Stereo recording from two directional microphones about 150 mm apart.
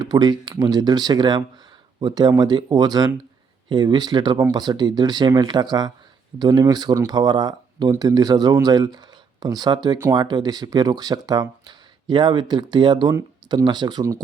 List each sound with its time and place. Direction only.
0.0 s speech: 25° right (ahead or behind)